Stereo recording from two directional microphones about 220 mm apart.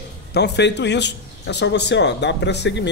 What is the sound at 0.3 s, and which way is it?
Speech, 50° left (ahead or behind).